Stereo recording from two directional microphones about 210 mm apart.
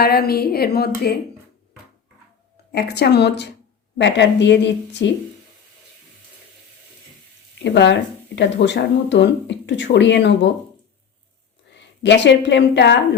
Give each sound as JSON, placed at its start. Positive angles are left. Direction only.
{"t": 0.0, "sound": "a woman's voice", "side_deg": 45}
{"t": 2.7, "sound": "a woman's voice", "side_deg": 50}
{"t": 7.6, "sound": "speech", "side_deg": 55}
{"t": 11.7, "sound": "a woman's voice", "side_deg": 55}